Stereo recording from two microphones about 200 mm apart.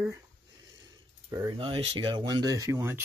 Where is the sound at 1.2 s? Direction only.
20° right (ahead or behind).